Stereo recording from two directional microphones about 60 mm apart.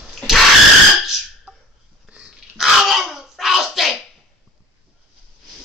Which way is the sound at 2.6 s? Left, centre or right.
Centre.